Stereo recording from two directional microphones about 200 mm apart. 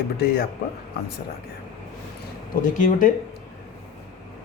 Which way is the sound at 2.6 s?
45° left (ahead or behind).